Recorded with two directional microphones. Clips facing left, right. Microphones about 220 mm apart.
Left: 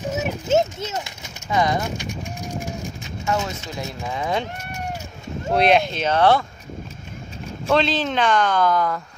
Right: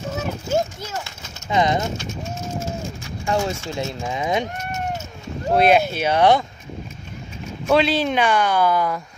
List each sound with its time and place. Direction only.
0.1 s a sound: 20° left (ahead or behind)
1.5 s speech: 20° right (ahead or behind)
2.0 s pigeon: 15° left (ahead or behind)
3.7 s speech: 20° right (ahead or behind)
5.5 s speech: 5° right (ahead or behind)
7.6 s speech: 10° right (ahead or behind)